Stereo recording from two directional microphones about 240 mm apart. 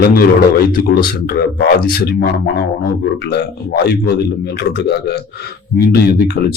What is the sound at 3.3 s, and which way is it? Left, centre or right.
Speech, left.